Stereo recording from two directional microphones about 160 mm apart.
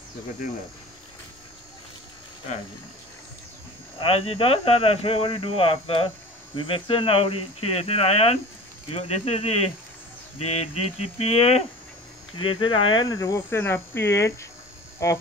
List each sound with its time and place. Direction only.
4.0 s speech: 35° left (ahead or behind); by 15.2 s 20° left (ahead or behind)